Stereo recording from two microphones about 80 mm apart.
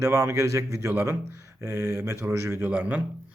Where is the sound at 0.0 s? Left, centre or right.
Right.